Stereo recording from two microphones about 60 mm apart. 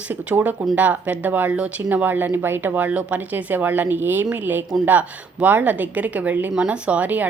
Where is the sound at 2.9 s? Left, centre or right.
Right.